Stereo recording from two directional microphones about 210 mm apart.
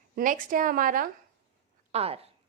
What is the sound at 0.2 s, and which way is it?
Speech, 40° right (ahead or behind).